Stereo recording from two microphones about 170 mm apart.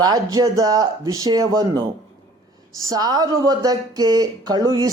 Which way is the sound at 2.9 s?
20° right (ahead or behind).